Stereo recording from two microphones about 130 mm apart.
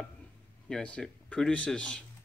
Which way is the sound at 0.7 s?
5° left (ahead or behind).